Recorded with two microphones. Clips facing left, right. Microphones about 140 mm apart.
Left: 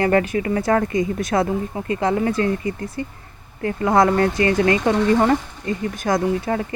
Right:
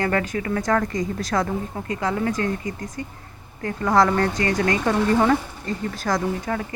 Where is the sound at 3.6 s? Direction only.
25° left (ahead or behind).